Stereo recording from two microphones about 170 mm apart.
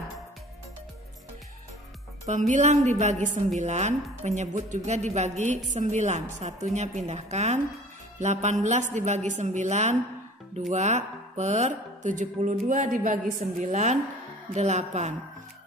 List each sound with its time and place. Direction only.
2.2 s a woman's voice: 45° right (ahead or behind)